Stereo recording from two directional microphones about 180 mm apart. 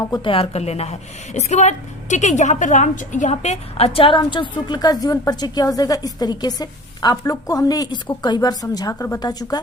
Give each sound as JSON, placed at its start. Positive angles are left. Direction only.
{"t": 0.0, "sound": "a woman's voice", "side_deg": 25}